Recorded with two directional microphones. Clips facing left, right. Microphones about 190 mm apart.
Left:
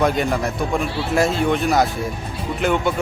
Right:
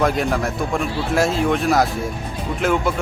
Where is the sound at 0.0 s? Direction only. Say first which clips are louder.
Even; centre (ahead or behind).